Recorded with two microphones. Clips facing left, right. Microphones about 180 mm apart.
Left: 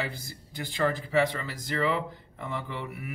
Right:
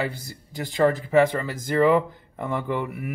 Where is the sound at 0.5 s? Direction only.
40° right (ahead or behind).